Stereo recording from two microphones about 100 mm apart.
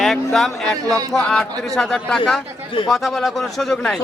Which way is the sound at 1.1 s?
5° left (ahead or behind).